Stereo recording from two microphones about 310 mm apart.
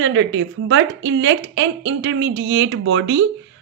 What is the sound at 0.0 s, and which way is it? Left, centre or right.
Speech, right.